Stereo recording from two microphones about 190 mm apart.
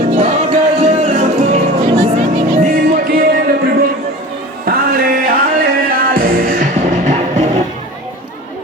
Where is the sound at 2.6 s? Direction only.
50° right (ahead or behind).